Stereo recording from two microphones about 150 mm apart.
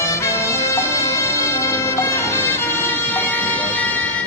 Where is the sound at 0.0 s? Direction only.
20° left (ahead or behind).